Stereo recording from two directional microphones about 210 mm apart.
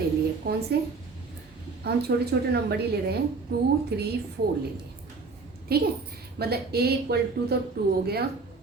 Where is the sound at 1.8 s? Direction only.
50° right (ahead or behind).